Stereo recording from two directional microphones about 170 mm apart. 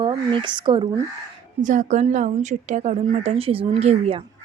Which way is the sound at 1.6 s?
45° right (ahead or behind).